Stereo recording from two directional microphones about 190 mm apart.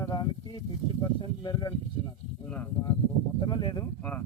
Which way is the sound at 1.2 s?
25° left (ahead or behind).